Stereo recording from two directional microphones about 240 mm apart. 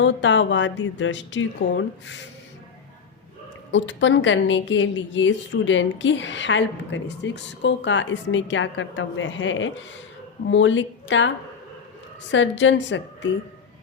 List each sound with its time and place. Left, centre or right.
0.0 s a woman's voice: left
3.7 s a woman's voice: left
12.3 s a woman's voice: left